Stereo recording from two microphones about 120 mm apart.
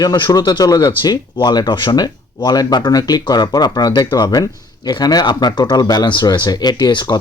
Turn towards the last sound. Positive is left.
turn(degrees=40)  # may be behind; listen again after turning